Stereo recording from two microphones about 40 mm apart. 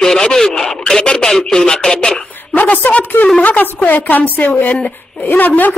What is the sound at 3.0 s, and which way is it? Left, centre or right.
Speech, left.